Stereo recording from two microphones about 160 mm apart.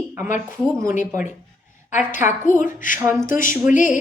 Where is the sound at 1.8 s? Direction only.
50° left (ahead or behind).